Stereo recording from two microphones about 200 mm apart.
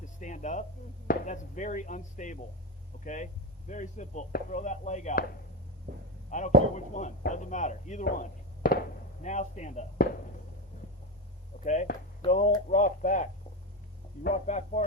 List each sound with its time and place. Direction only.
0.0 s a sound: 40° left (ahead or behind)
1.0 s speech: 40° left (ahead or behind)
6.3 s speech: 40° left (ahead or behind)
11.6 s speech: 35° left (ahead or behind)
14.3 s speech: 35° left (ahead or behind)